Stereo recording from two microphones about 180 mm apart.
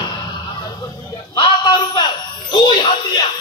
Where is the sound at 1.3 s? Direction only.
25° left (ahead or behind).